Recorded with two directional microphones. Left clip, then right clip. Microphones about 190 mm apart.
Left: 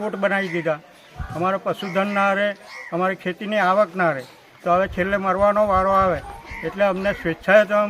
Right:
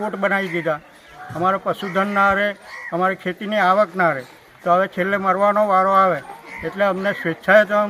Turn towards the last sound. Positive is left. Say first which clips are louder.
# right 1 dB
turn(degrees=0)  # may be behind; listen again after turning